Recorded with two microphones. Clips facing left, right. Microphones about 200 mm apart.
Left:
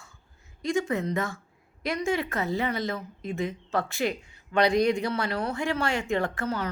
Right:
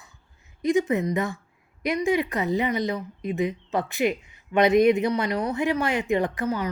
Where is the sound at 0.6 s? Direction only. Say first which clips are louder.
Right 5 dB; 20° right (ahead or behind).